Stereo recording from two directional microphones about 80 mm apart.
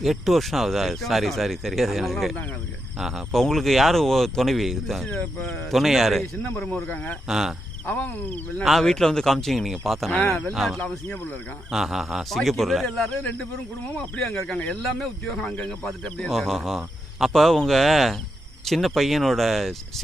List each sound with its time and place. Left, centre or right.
0.0 s speech: centre
5.1 s speech: centre
5.7 s speech: centre
6.9 s speech: left
7.3 s speech: centre
7.9 s speech: left
8.6 s speech: centre
10.1 s speech: centre
10.5 s speech: centre
14.2 s speech: centre